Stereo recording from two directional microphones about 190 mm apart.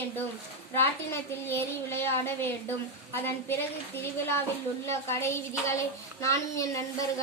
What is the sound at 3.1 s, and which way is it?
Speech, 10° left (ahead or behind).